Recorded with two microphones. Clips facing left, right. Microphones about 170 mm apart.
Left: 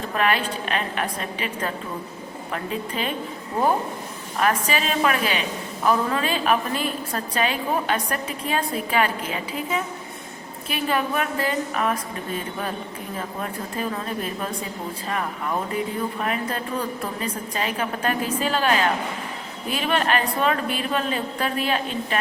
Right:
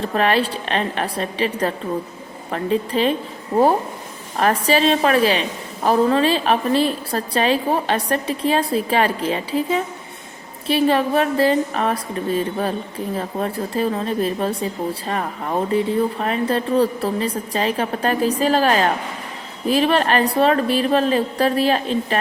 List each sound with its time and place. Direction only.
0.1 s a woman's voice: 35° right (ahead or behind)
4.4 s a woman's voice: 35° right (ahead or behind)